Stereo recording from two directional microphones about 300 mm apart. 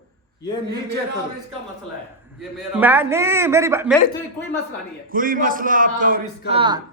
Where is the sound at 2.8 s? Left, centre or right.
Centre.